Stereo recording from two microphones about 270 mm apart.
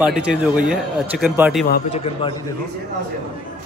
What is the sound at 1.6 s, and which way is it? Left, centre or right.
Speech, left.